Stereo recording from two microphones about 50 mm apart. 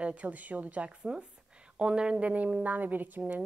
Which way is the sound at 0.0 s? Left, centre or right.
Right.